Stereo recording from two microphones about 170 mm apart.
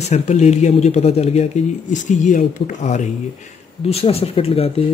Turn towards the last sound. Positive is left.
turn(degrees=35)  # may be behind; listen again after turning